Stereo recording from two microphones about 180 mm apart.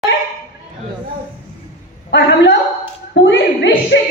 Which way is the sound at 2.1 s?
80° left.